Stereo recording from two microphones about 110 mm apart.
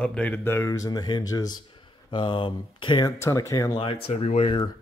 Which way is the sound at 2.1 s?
45° left (ahead or behind).